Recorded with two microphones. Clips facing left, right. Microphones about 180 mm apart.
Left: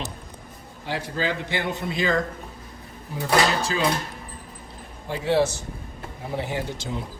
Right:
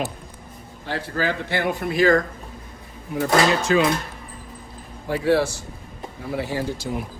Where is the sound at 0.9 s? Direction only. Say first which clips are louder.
Right 2 dB; 15° left (ahead or behind).